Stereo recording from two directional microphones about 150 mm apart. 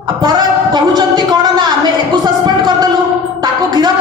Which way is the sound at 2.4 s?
25° right (ahead or behind).